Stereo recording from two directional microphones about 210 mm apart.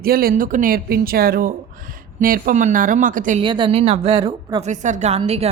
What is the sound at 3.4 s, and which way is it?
A woman's voice, 25° right (ahead or behind).